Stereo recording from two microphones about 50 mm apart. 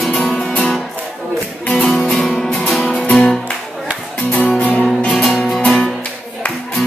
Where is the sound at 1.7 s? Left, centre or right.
Centre.